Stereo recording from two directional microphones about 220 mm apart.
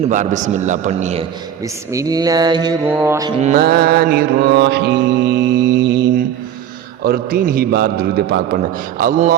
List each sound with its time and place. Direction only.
0.1 s a man's voice: 35° right (ahead or behind)
1.6 s mantra: 15° right (ahead or behind)
3.4 s mantra: 40° right (ahead or behind)